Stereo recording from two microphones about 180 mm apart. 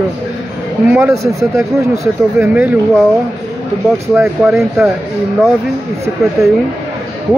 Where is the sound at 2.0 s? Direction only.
5° right (ahead or behind).